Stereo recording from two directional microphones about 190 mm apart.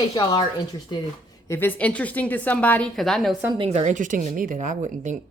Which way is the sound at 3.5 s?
30° right (ahead or behind).